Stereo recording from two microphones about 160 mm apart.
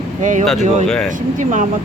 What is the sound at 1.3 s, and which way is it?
Speech, 55° right (ahead or behind).